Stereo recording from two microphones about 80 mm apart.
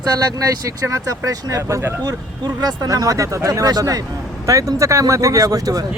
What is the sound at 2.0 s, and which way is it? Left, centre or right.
Speech, right.